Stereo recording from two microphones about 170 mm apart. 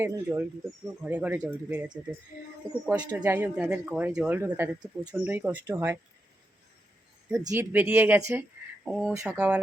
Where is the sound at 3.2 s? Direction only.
10° right (ahead or behind).